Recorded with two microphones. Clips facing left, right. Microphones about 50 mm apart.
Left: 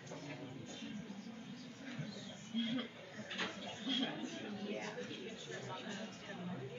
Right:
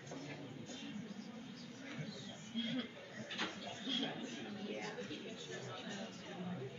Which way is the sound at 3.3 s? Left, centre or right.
Left.